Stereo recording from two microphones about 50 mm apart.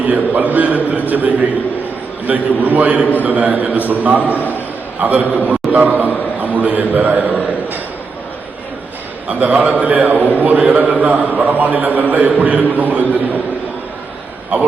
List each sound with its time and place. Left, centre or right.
0.0 s a man's voice: right
4.4 s a man's voice: left
4.9 s a man's voice: right
5.6 s a sound: centre
6.4 s a sound: right
9.2 s a man's voice: right
14.5 s a man's voice: right